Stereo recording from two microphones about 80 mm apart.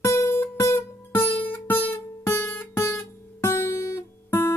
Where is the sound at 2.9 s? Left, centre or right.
Left.